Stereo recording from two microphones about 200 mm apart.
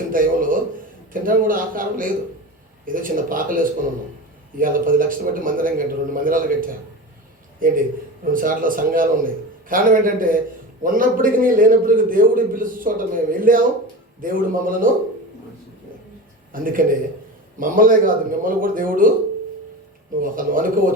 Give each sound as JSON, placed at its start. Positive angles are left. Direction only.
{"t": 0.1, "sound": "a sound", "side_deg": -45}
{"t": 1.1, "sound": "a man's voice", "side_deg": -45}
{"t": 16.5, "sound": "a man's voice", "side_deg": -45}
{"t": 20.2, "sound": "a man's voice", "side_deg": -45}